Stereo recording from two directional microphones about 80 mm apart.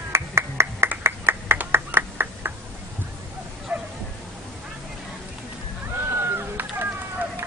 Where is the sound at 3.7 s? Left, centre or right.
Right.